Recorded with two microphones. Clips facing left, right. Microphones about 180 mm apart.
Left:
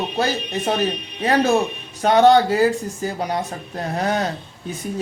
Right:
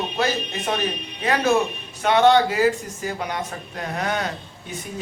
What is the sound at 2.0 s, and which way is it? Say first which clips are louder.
Speech: left 3 dB; 35° left (ahead or behind).